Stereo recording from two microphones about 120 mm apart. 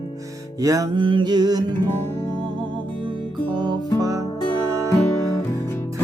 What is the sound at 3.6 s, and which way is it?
Music, 35° right (ahead or behind).